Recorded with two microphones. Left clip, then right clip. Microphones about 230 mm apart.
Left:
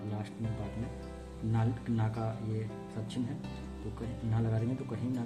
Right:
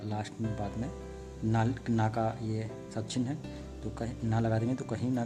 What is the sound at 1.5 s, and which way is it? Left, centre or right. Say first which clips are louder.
Speech: right 5 dB; right.